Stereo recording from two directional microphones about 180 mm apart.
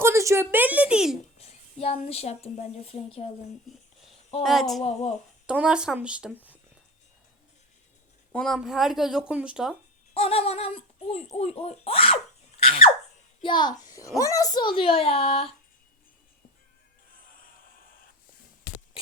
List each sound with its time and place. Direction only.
0.0 s a woman's voice: 15° right (ahead or behind)
1.4 s a woman's voice: 35° left (ahead or behind)
4.3 s a sound: 35° left (ahead or behind)
5.5 s speech: 5° right (ahead or behind)
8.3 s speech: 5° left (ahead or behind)
10.2 s a sound: 35° left (ahead or behind)
11.3 s a child's voice: 35° left (ahead or behind)